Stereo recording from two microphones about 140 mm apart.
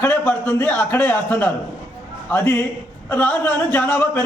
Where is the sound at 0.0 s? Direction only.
15° left (ahead or behind).